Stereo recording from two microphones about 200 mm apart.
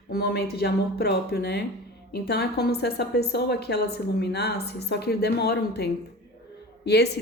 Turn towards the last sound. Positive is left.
turn(degrees=55)  # may be behind; listen again after turning